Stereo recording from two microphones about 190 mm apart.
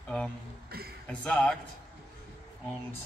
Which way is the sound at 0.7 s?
55° right (ahead or behind).